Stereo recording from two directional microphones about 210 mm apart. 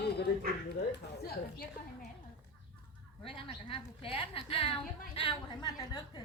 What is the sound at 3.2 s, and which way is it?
A woman's voice, 25° left (ahead or behind).